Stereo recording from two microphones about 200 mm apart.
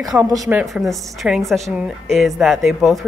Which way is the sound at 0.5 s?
5° right (ahead or behind).